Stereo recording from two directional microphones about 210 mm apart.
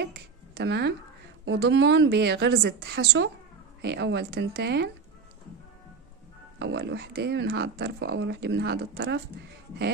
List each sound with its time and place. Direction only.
0.0 s speech: 50° right (ahead or behind)
6.6 s speech: 55° right (ahead or behind)